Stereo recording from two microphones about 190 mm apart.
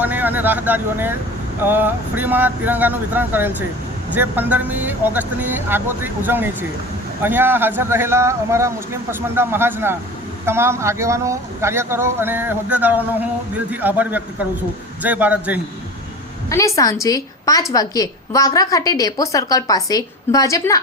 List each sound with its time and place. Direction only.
0.0 s speech: 10° right (ahead or behind)
16.5 s a woman's voice: 15° left (ahead or behind)